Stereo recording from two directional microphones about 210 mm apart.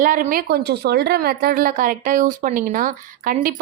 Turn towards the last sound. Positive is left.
turn(degrees=-40)  # may be behind; listen again after turning